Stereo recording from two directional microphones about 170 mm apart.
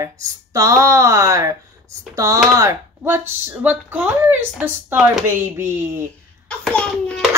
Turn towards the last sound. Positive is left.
turn(degrees=5)  # may be behind; listen again after turning